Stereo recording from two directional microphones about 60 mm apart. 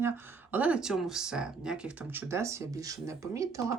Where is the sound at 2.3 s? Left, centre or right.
Right.